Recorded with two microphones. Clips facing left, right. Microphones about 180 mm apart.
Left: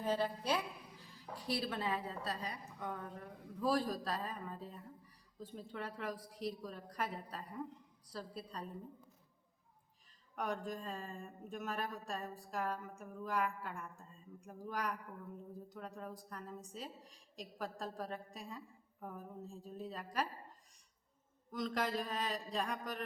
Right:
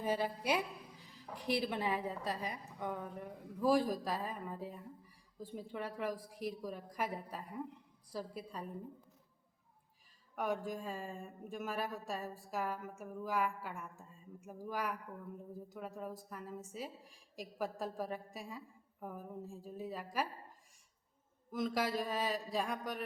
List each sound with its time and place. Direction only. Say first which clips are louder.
0.0 s speech: right 1 dB; 10° right (ahead or behind)
10.3 s speech: right 3 dB; 5° right (ahead or behind)
21.5 s speech: right 2 dB; 5° right (ahead or behind)